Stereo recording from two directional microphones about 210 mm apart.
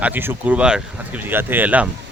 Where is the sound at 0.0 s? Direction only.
10° right (ahead or behind).